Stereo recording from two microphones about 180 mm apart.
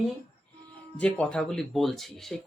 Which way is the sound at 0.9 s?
5° left (ahead or behind).